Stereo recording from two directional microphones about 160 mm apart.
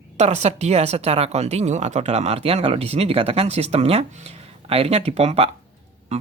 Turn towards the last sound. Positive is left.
turn(degrees=-40)  # may be behind; listen again after turning